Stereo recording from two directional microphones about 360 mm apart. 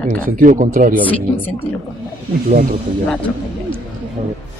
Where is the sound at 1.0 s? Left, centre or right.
Centre.